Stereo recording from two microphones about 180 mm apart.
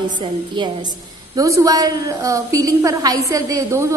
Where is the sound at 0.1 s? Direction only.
25° right (ahead or behind).